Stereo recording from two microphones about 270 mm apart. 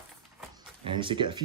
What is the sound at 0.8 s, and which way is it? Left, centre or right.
Speech, centre.